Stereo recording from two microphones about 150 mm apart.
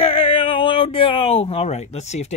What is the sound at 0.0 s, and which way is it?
Speech, 40° left (ahead or behind).